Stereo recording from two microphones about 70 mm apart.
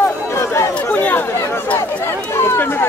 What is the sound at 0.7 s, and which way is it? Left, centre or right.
Chatter, left.